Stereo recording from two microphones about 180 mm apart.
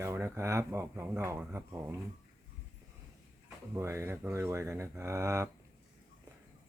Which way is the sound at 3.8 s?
15° right (ahead or behind).